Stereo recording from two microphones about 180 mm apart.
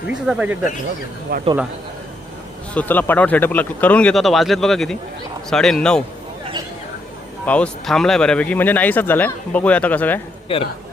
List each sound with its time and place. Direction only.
0.1 s speech: 5° right (ahead or behind)
1.3 s speech: 55° right (ahead or behind)
2.7 s speech: 10° left (ahead or behind)
7.4 s speech: 5° left (ahead or behind)
10.5 s speech: 30° left (ahead or behind)